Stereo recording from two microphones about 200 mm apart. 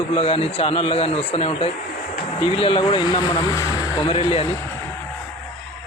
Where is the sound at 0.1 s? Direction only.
25° left (ahead or behind).